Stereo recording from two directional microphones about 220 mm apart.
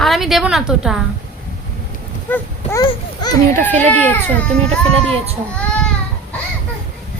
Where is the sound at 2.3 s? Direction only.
15° left (ahead or behind).